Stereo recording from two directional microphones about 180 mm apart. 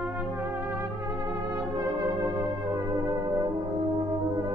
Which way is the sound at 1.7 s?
20° right (ahead or behind).